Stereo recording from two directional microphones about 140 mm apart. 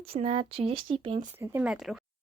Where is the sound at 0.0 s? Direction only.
45° right (ahead or behind).